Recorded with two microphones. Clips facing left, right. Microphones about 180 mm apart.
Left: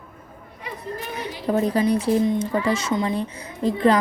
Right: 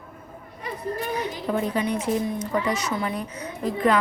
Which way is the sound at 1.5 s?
35° left (ahead or behind).